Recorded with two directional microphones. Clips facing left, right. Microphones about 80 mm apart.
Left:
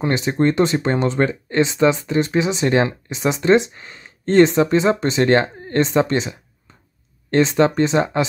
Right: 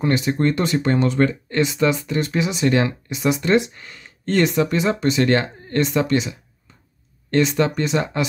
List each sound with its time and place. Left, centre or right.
0.0 s speech: left